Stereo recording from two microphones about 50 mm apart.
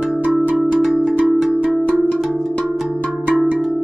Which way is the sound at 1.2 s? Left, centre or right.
Centre.